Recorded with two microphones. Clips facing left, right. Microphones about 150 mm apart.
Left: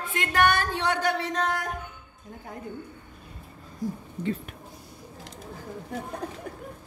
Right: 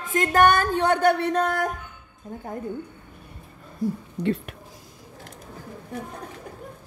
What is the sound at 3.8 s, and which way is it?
Speech, 60° right (ahead or behind).